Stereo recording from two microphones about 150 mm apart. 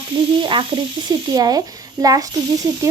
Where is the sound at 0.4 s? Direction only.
35° right (ahead or behind).